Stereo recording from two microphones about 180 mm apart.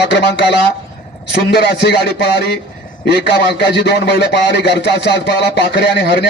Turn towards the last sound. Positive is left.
turn(degrees=70)  # may be behind; listen again after turning